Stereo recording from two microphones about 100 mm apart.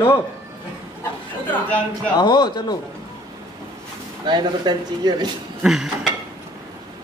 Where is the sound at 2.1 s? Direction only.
45° left (ahead or behind).